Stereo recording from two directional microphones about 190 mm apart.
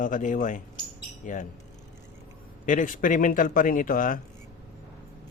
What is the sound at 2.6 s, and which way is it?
Speech, 45° left (ahead or behind).